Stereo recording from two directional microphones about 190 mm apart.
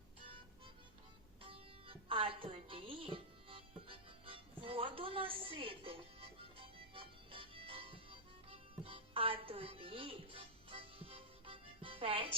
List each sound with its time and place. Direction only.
1.4 s music: 30° right (ahead or behind)